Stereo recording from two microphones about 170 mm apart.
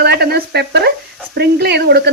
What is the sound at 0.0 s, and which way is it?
Stir, 70° right (ahead or behind).